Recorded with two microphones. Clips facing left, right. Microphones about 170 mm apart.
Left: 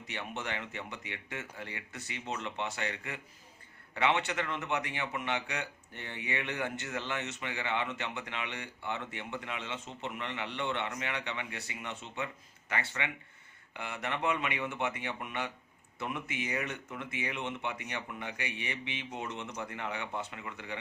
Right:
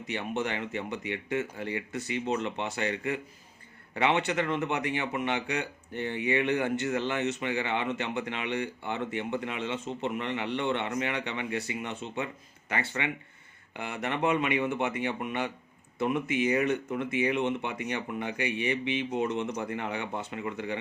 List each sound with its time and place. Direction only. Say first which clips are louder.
0.1 s speech: right 7 dB; 20° right (ahead or behind)
13.7 s speech: right 5 dB; 20° right (ahead or behind)